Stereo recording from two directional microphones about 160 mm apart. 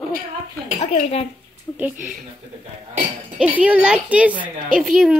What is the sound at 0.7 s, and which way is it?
Speech, 40° left (ahead or behind).